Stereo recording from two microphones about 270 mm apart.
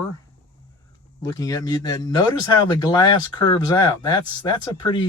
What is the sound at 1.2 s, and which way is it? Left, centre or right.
Speech, centre.